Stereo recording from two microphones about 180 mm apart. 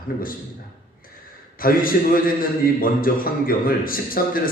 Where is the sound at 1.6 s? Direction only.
50° left (ahead or behind).